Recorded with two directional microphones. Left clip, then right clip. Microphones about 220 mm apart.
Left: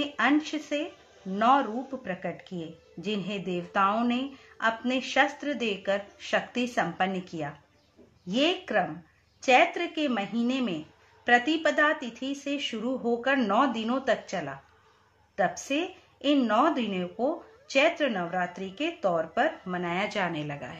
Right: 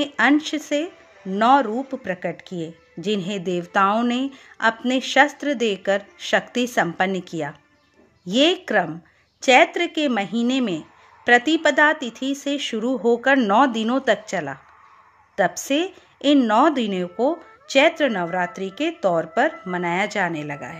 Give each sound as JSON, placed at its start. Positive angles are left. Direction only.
{"t": 0.0, "sound": "speech", "side_deg": -40}